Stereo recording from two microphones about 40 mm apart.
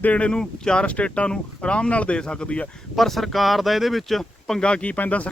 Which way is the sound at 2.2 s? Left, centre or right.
Left.